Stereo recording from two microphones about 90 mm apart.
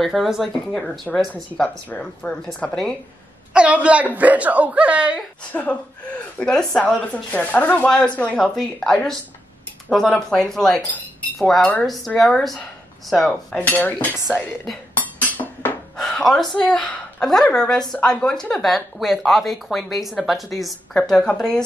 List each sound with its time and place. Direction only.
0.0 s speech: centre (ahead or behind)
1.6 s a woman's voice: 10° left (ahead or behind)
3.5 s speech: 15° right (ahead or behind)
5.5 s a woman's voice: 15° left (ahead or behind)
6.4 s speech: 5° left (ahead or behind)
7.2 s a woman's voice: 15° left (ahead or behind)
13.6 s a woman's voice: 20° left (ahead or behind)
15.0 s music: 15° left (ahead or behind)
16.0 s gasp: 5° left (ahead or behind)
16.8 s a woman's voice: 5° left (ahead or behind)